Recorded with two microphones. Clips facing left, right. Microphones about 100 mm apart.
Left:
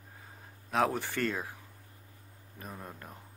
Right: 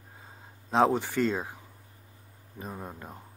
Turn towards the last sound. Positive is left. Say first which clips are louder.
# right 5 dB
turn(degrees=-20)  # may be behind; listen again after turning